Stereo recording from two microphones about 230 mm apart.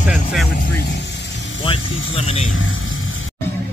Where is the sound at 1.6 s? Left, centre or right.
Left.